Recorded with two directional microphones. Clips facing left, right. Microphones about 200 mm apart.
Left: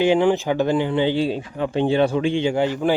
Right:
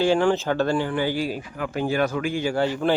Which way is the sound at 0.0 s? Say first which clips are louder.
Left 3 dB; 20° left (ahead or behind).